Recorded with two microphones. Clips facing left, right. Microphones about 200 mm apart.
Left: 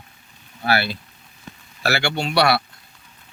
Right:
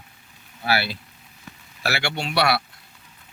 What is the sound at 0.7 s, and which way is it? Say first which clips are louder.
Speech: left 2 dB; 5° right (ahead or behind).